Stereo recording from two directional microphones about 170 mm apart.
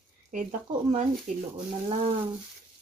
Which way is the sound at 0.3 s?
50° right (ahead or behind).